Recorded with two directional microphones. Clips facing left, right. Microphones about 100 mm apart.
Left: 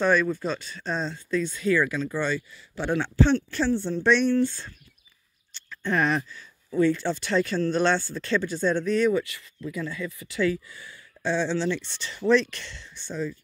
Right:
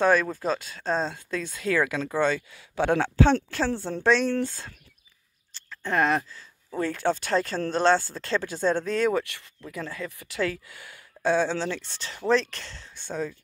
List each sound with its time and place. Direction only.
0.0 s speech: 45° right (ahead or behind); by 3.5 s 70° right (ahead or behind)
3.6 s speech: 50° right (ahead or behind)
5.5 s a sound: 35° right (ahead or behind)
6.7 s speech: 50° right (ahead or behind)
9.1 s speech: 55° right (ahead or behind)